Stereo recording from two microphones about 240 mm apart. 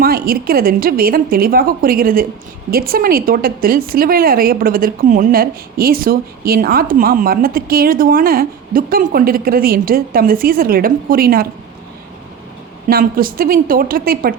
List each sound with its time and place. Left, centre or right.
0.0 s a woman's voice: right
12.9 s a woman's voice: right